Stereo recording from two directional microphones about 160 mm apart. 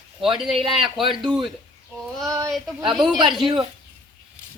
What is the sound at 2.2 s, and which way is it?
Speech, 20° right (ahead or behind).